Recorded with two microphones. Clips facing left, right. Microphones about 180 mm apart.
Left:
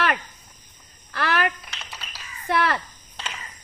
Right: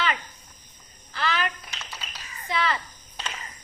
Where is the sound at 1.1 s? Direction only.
65° left (ahead or behind).